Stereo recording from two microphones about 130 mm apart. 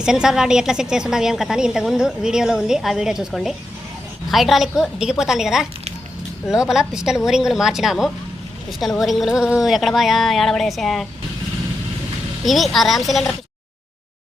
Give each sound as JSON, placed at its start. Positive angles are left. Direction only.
{"t": 0.0, "sound": "a woman's voice", "side_deg": -5}
{"t": 12.5, "sound": "a woman's voice", "side_deg": 0}